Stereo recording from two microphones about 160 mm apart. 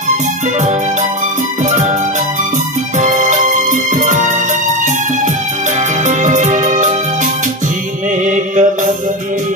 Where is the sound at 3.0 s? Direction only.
50° right (ahead or behind).